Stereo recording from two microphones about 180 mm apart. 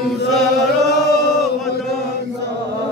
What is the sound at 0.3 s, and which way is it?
Chant, 65° right (ahead or behind).